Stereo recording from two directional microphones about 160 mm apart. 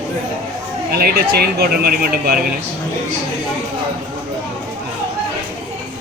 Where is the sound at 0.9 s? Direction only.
75° right (ahead or behind).